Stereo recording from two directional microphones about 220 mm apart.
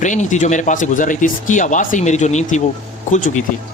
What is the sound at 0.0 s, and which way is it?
Speech, 35° left (ahead or behind).